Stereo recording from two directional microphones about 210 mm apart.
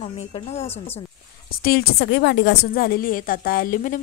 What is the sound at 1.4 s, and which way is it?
A woman's voice, 45° left (ahead or behind).